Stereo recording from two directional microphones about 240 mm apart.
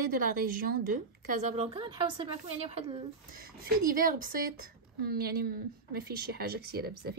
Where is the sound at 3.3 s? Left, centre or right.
Right.